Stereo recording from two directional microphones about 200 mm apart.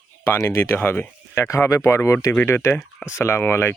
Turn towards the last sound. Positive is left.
turn(degrees=10)  # may be behind; listen again after turning